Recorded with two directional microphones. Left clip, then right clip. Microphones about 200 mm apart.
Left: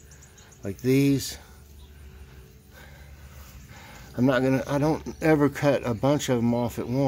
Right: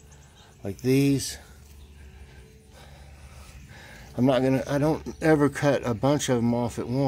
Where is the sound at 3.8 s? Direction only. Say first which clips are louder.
Even; centre (ahead or behind).